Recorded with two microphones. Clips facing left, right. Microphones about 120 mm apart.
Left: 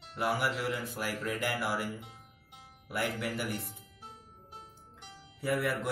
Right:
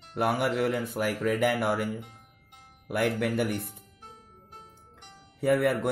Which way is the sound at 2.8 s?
60° right (ahead or behind).